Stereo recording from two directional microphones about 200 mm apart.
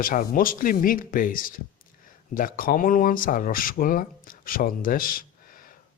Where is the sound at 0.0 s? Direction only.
45° left (ahead or behind).